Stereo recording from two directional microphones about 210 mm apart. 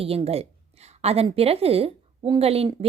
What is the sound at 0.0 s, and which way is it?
A woman's voice, 25° right (ahead or behind).